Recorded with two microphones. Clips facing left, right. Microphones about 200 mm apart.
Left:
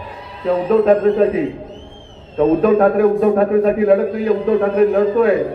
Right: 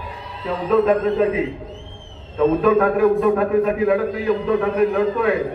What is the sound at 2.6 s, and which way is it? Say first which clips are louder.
A man's voice: left 3 dB; 35° left (ahead or behind).